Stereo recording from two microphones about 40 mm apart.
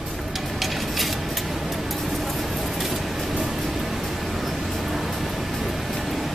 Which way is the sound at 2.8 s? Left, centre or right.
Centre.